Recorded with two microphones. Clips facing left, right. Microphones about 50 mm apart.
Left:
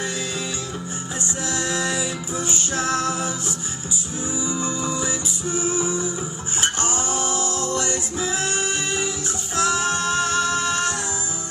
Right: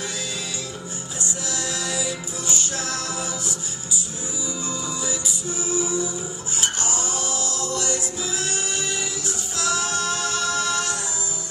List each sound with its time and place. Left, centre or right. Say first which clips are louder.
1.2 s music: left 3 dB; left
4.8 s music: left 3 dB; left